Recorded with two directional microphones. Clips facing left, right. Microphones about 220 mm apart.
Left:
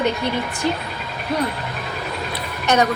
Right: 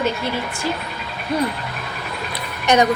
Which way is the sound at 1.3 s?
Centre (ahead or behind).